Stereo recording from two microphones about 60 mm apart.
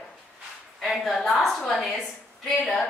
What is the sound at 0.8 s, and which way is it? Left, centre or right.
A woman's voice, centre.